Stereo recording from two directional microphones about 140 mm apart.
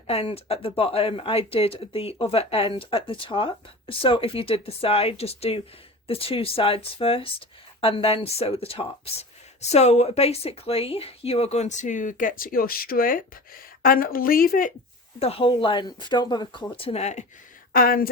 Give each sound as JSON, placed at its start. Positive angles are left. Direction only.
{"t": 0.1, "sound": "a woman's voice", "side_deg": 45}
{"t": 15.2, "sound": "speech", "side_deg": 45}
{"t": 17.7, "sound": "a woman's voice", "side_deg": 90}